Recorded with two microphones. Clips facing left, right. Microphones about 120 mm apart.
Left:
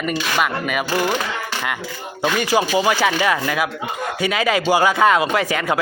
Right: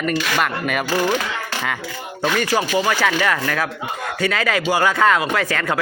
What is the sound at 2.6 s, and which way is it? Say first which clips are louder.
Speech: left 5 dB; 15° left (ahead or behind).